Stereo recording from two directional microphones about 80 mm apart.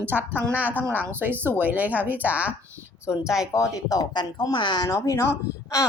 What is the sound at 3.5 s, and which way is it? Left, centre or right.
Speech, left.